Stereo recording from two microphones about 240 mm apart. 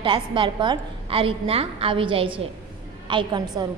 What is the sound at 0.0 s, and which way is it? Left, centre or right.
A woman's voice, right.